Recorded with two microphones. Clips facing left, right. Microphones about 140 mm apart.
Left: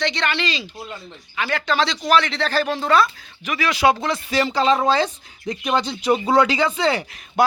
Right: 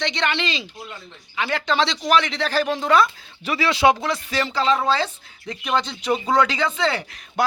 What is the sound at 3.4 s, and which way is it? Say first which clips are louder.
Speech: right 1 dB; 30° right (ahead or behind).